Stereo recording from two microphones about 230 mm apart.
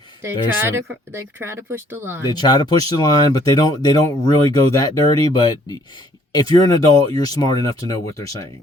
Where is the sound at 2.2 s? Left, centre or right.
Centre.